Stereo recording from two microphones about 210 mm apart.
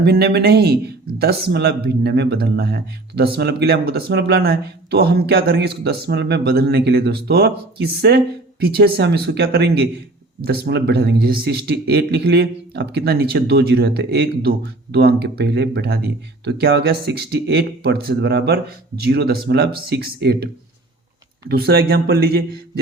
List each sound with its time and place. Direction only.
0.0 s speech: 50° right (ahead or behind)
21.5 s speech: 50° right (ahead or behind)